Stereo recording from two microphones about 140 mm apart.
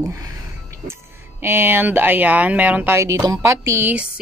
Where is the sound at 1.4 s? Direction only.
15° right (ahead or behind).